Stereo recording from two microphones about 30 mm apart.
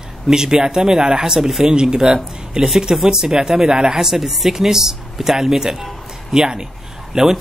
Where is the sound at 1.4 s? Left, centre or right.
Centre.